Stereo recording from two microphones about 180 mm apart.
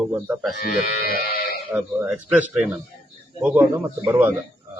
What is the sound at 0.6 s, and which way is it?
Music, 55° left (ahead or behind).